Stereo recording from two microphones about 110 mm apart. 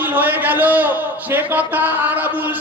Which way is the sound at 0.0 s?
15° right (ahead or behind).